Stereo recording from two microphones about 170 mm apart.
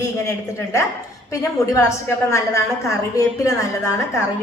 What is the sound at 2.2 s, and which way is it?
A woman's voice, 15° left (ahead or behind).